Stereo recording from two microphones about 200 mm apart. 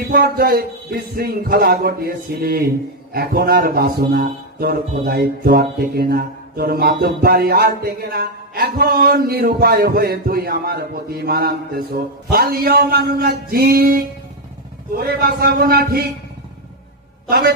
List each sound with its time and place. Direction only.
0.1 s speech: 50° right (ahead or behind)
17.3 s speech: 50° right (ahead or behind)